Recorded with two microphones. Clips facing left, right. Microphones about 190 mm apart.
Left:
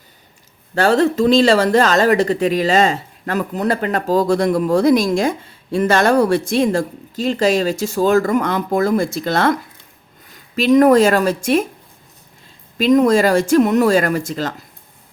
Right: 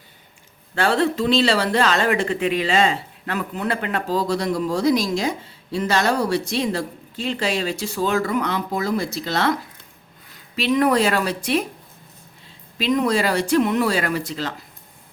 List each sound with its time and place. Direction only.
0.8 s speech: 40° left (ahead or behind)
12.8 s speech: 45° left (ahead or behind)